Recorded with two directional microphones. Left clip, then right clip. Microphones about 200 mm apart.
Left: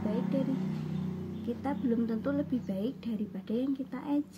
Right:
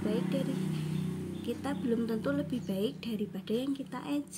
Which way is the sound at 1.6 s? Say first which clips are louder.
Left 1 dB; 35° right (ahead or behind).